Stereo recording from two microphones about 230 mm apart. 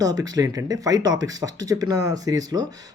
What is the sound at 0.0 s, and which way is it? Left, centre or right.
Speech, centre.